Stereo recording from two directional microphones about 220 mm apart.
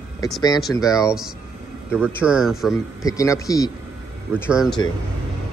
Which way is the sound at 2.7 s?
15° left (ahead or behind).